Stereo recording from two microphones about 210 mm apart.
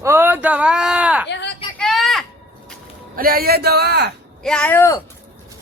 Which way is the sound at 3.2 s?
45° right (ahead or behind).